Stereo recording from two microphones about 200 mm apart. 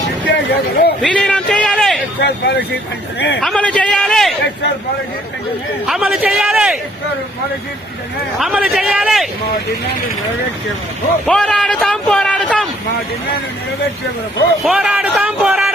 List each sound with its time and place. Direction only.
0.3 s speech: 55° left (ahead or behind)
1.0 s a sound: 5° left (ahead or behind)
2.2 s speech: 55° left (ahead or behind)
3.4 s speech: 5° left (ahead or behind)
5.8 s speech: 5° right (ahead or behind)
8.4 s speech: 5° right (ahead or behind)
11.3 s a man's voice: 5° left (ahead or behind)
14.6 s speech: 5° right (ahead or behind)